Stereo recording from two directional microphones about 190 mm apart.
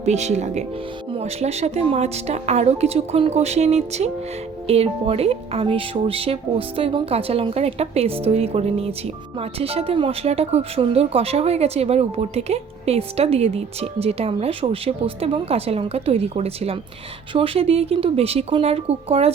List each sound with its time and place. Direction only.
0.0 s speech: 35° right (ahead or behind)